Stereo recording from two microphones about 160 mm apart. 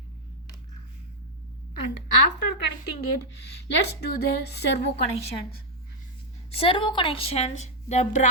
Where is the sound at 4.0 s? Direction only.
85° left.